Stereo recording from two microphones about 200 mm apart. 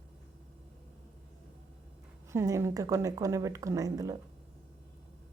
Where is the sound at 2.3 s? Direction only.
15° right (ahead or behind).